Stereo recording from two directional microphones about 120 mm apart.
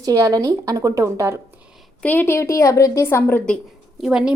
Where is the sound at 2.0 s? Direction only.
15° left (ahead or behind).